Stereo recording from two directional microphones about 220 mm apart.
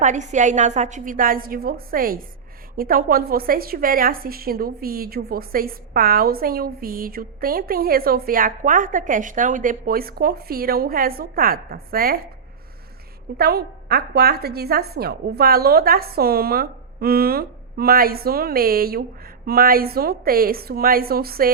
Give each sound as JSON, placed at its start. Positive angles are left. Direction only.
{"t": 0.0, "sound": "a woman's voice", "side_deg": -35}
{"t": 13.3, "sound": "a woman's voice", "side_deg": -45}